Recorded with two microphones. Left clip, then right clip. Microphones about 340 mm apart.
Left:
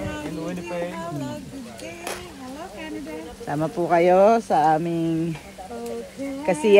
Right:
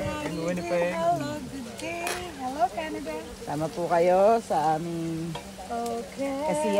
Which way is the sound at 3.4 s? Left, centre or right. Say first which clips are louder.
Left 5 dB; left.